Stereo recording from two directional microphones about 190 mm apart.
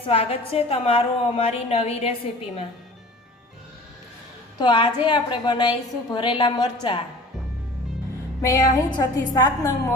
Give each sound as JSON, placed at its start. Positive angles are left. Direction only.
{"t": 0.0, "sound": "a woman's voice", "side_deg": 30}
{"t": 4.6, "sound": "a woman's voice", "side_deg": 25}
{"t": 8.4, "sound": "a woman's voice", "side_deg": 15}